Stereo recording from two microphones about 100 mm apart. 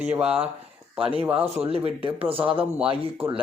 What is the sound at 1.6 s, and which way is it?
Speech, 80° right.